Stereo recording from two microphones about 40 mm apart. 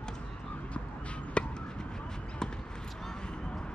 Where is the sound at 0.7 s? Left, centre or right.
Left.